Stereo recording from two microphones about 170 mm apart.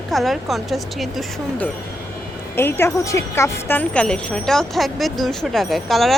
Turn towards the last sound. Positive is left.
turn(degrees=0)  # may be behind; listen again after turning